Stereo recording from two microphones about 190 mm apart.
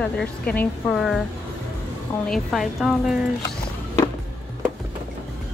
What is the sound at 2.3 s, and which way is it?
Speech, centre (ahead or behind).